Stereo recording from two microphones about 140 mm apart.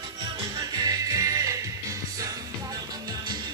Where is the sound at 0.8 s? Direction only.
25° right (ahead or behind).